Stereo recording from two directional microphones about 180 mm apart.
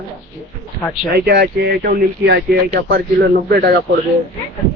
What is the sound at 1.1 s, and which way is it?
Speech, 65° right (ahead or behind).